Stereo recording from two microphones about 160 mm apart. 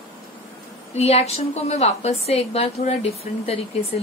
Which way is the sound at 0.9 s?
40° left (ahead or behind).